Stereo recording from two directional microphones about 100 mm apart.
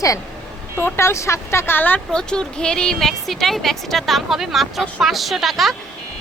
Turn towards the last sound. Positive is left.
turn(degrees=0)  # may be behind; listen again after turning